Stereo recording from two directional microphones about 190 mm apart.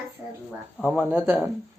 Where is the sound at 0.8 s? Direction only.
Centre (ahead or behind).